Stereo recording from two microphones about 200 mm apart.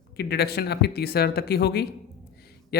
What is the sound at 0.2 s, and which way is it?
A man's voice, 55° left (ahead or behind).